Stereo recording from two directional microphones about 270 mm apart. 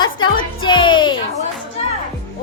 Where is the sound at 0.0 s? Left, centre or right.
Centre.